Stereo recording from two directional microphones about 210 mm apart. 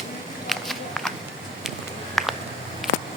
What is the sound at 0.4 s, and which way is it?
Walk, centre (ahead or behind).